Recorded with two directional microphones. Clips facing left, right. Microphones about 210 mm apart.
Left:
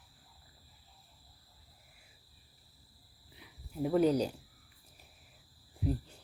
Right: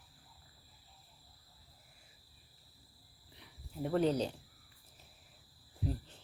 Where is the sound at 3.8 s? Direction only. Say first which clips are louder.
Left 4 dB; 10° left (ahead or behind).